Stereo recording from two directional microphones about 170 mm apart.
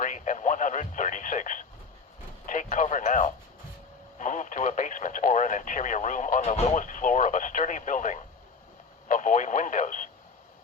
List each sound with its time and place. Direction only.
0.0 s radio: 50° left (ahead or behind)
2.5 s a sound: 50° left (ahead or behind)
4.2 s radio: 50° left (ahead or behind)